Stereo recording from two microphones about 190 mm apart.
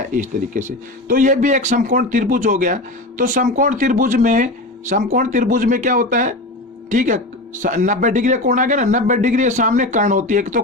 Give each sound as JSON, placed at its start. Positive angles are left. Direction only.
{"t": 0.1, "sound": "a man's voice", "side_deg": -40}